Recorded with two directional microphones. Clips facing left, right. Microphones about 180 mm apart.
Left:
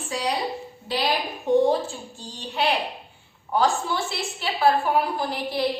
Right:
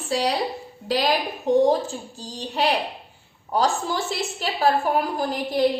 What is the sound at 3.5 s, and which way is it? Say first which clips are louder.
A woman's voice: even; 40° right (ahead or behind).